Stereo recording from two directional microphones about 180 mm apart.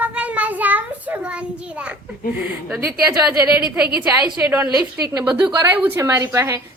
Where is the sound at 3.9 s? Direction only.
10° right (ahead or behind).